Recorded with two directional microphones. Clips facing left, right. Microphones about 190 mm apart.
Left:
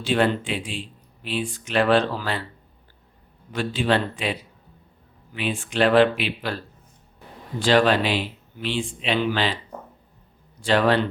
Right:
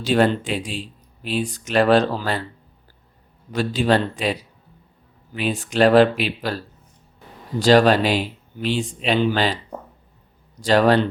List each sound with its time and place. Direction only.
0.0 s speech: 40° right (ahead or behind)
3.5 s speech: 40° right (ahead or behind)
7.6 s speech: 40° right (ahead or behind)
10.6 s speech: 40° right (ahead or behind)